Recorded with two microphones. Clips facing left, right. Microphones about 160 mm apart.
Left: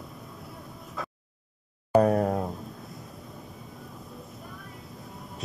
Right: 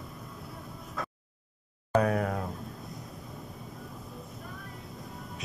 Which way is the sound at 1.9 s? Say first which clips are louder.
Left 5 dB; 10° left (ahead or behind).